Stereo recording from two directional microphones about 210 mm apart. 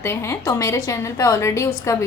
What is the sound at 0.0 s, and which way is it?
Speech, 10° left (ahead or behind).